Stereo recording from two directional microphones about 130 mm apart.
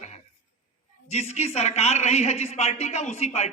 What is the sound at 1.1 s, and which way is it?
A man's voice, 55° left (ahead or behind).